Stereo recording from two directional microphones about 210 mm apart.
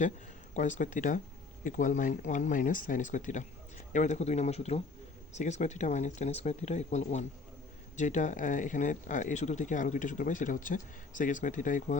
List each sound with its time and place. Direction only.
0.5 s speech: 35° left (ahead or behind)